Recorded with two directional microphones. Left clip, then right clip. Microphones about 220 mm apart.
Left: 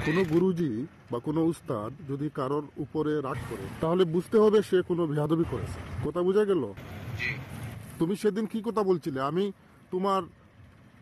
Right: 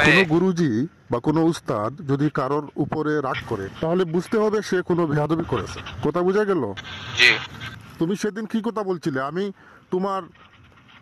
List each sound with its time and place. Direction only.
0.0 s speech: 40° right (ahead or behind)
3.8 s speech: 25° right (ahead or behind)
4.1 s speech: 40° right (ahead or behind)